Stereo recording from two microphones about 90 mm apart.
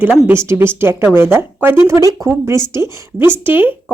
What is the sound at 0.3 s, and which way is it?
Speech, 25° right (ahead or behind).